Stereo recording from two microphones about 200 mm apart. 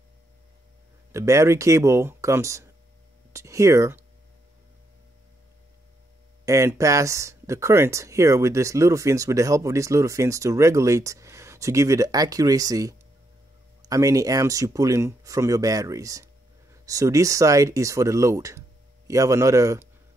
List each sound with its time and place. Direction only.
1.1 s speech: 15° right (ahead or behind)
6.4 s speech: 15° right (ahead or behind)